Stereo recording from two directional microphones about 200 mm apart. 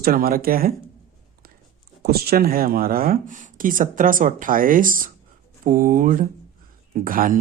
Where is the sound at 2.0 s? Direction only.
50° right (ahead or behind).